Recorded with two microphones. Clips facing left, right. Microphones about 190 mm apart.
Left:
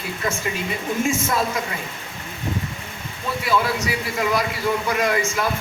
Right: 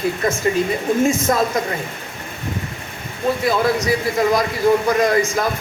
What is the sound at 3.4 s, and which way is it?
Speech, 40° right (ahead or behind).